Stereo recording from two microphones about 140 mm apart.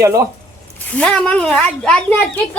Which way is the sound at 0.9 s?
10° left (ahead or behind).